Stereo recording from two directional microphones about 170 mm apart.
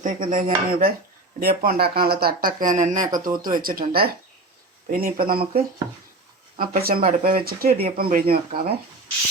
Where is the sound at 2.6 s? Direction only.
50° right (ahead or behind).